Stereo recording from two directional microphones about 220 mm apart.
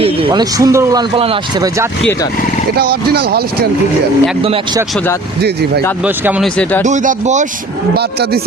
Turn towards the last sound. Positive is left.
turn(degrees=-35)  # may be behind; listen again after turning